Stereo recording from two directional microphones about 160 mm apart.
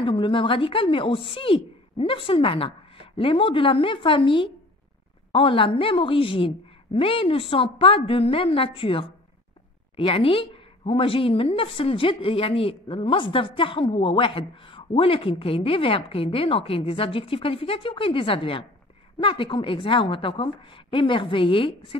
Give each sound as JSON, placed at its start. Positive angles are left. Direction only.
{"t": 0.0, "sound": "a woman's voice", "side_deg": 30}